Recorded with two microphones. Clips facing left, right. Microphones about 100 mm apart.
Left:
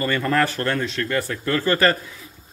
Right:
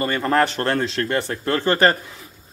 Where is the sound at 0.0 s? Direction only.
30° right (ahead or behind).